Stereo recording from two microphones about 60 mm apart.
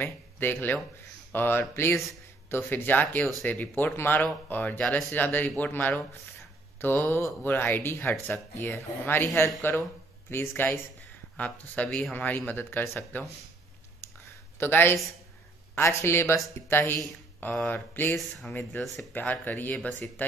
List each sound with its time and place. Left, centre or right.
0.0 s speech: left
3.9 s speech: left
4.2 s speech: left
11.3 s speech: left
14.0 s a sound: left
14.6 s speech: left